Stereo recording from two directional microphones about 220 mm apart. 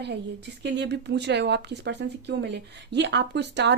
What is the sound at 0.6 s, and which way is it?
A woman's voice, 50° right (ahead or behind).